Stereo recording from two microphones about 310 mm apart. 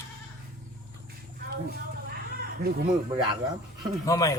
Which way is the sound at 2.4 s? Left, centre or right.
Right.